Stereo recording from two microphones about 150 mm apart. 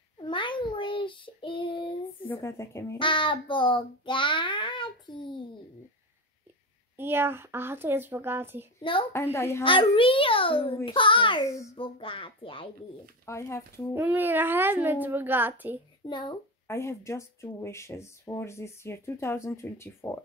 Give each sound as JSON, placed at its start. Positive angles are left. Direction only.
{"t": 0.2, "sound": "child singing", "side_deg": 35}
{"t": 2.2, "sound": "speech", "side_deg": 15}
{"t": 3.0, "sound": "a child's voice", "side_deg": 35}
{"t": 7.0, "sound": "a child's voice", "side_deg": -15}
{"t": 9.1, "sound": "speech", "side_deg": 15}
{"t": 9.6, "sound": "a child's voice", "side_deg": 35}
{"t": 13.2, "sound": "speech", "side_deg": 20}
{"t": 13.9, "sound": "a child's voice", "side_deg": -15}
{"t": 16.1, "sound": "a child's voice", "side_deg": 30}
{"t": 16.6, "sound": "speech", "side_deg": 15}